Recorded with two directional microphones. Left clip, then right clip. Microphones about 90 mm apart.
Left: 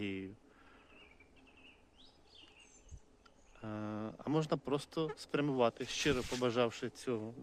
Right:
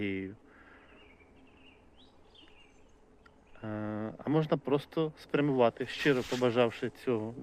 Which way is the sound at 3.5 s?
25° left (ahead or behind).